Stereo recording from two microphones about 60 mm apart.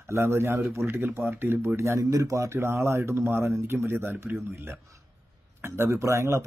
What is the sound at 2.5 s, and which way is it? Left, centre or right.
Speech, right.